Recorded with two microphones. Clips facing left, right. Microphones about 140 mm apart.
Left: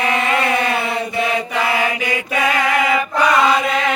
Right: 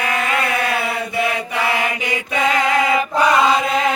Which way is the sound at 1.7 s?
15° right (ahead or behind).